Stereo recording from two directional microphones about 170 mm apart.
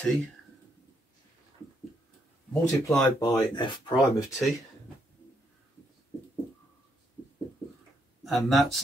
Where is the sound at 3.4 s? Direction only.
25° left (ahead or behind).